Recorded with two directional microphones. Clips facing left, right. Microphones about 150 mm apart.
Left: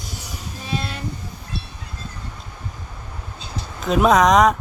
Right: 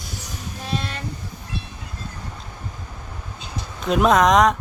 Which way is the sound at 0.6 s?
5° left (ahead or behind).